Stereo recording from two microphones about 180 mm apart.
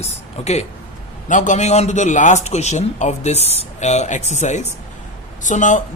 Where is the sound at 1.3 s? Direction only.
45° left (ahead or behind).